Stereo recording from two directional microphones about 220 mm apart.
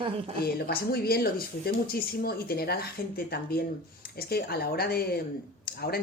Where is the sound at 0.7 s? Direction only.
45° left (ahead or behind).